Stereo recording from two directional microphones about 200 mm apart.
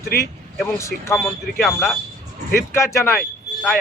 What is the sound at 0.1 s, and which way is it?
Speech, 50° left (ahead or behind).